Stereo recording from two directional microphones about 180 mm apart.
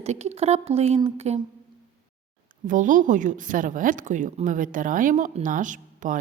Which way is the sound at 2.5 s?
45° right (ahead or behind).